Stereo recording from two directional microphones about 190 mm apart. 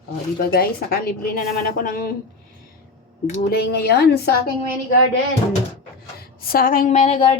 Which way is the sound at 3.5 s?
55° left (ahead or behind).